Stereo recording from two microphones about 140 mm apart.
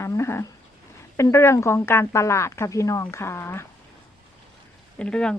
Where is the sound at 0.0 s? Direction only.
20° left (ahead or behind).